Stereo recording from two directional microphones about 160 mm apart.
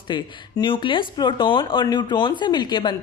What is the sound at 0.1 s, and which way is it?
Speech, 30° left (ahead or behind).